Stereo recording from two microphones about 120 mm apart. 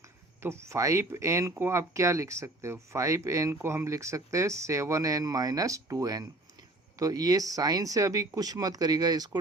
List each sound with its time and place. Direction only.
0.4 s speech: 20° right (ahead or behind)